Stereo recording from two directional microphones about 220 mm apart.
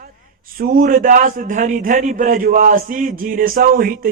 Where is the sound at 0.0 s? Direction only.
40° right (ahead or behind).